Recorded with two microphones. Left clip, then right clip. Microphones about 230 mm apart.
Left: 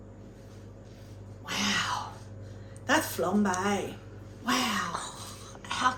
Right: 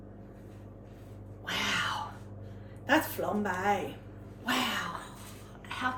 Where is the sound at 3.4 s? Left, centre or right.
Centre.